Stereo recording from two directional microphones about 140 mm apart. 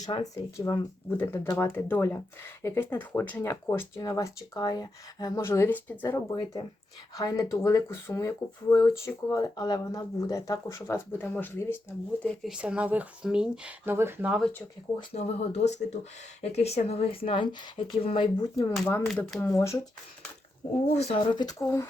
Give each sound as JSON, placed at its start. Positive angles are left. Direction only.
{"t": 0.0, "sound": "speech", "side_deg": 25}
{"t": 1.1, "sound": "speech", "side_deg": 15}
{"t": 6.3, "sound": "speech", "side_deg": 30}
{"t": 12.5, "sound": "speech", "side_deg": -10}
{"t": 14.3, "sound": "speech", "side_deg": -5}
{"t": 15.1, "sound": "speech", "side_deg": 50}
{"t": 18.3, "sound": "speech", "side_deg": 30}
{"t": 19.0, "sound": "speech", "side_deg": 0}
{"t": 19.4, "sound": "speech", "side_deg": 20}
{"t": 20.8, "sound": "speech", "side_deg": 45}